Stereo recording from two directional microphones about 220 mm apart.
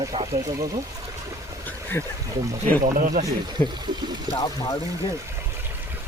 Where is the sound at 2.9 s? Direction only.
40° right (ahead or behind).